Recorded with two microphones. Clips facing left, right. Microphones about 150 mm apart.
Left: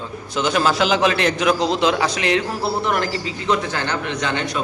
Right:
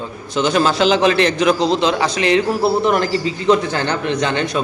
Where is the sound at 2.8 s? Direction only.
25° right (ahead or behind).